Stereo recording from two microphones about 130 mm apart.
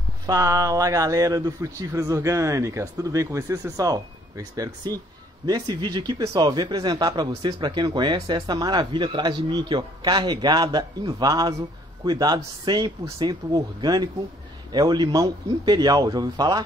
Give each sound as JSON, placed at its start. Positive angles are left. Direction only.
{"t": 0.3, "sound": "speech", "side_deg": -25}